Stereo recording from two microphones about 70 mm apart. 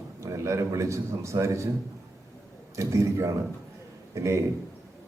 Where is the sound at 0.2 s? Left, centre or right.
Right.